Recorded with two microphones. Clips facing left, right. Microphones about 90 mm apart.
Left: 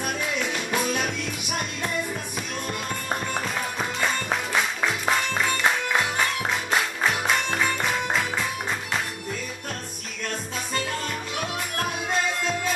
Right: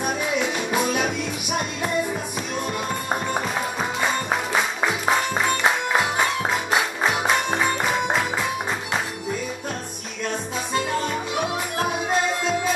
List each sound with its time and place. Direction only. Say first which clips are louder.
0.0 s music: right 4 dB; 10° right (ahead or behind)
4.0 s music: right 2 dB; 15° right (ahead or behind)
10.7 s music: right 6 dB; 10° right (ahead or behind)